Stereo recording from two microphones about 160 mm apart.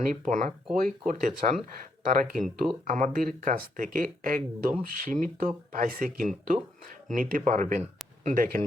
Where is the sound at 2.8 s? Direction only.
50° right (ahead or behind).